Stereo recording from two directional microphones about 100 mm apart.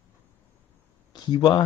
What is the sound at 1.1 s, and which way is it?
Speech, 50° left (ahead or behind).